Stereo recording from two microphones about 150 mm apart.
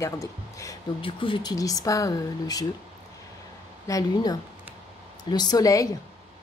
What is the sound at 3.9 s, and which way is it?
Speech, 25° left (ahead or behind).